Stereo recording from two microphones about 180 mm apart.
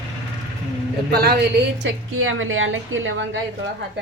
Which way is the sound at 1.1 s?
60° right (ahead or behind).